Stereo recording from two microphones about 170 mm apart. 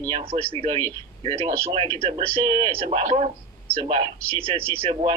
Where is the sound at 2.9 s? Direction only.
40° right (ahead or behind).